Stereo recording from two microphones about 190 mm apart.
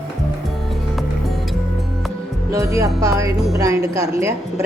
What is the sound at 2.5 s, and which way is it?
A woman's voice, 15° right (ahead or behind).